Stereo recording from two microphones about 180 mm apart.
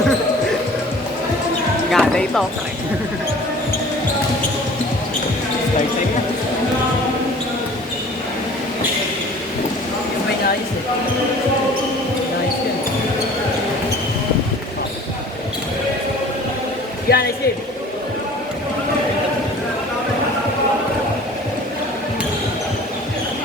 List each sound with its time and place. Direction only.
1.9 s basketball bounce: 5° left (ahead or behind)
17.1 s speech: 60° left (ahead or behind)